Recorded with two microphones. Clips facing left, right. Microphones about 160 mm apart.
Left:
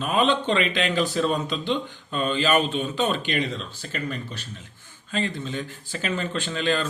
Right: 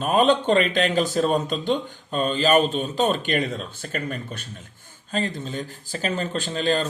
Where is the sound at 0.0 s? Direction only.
45° right (ahead or behind).